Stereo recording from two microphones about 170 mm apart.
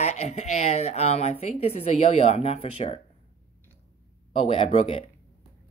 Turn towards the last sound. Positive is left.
turn(degrees=40)  # may be behind; listen again after turning